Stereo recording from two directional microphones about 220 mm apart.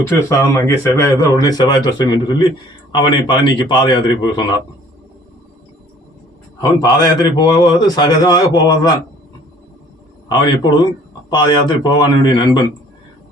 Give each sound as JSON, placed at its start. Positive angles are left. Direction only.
{"t": 0.1, "sound": "a man's voice", "side_deg": 15}
{"t": 6.6, "sound": "speech", "side_deg": 20}
{"t": 10.2, "sound": "a man's voice", "side_deg": 20}